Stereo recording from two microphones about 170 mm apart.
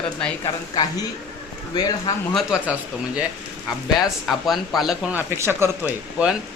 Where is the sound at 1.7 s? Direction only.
25° left (ahead or behind).